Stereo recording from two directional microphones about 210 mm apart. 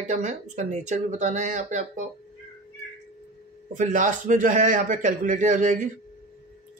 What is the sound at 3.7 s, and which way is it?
Speech, 40° right (ahead or behind).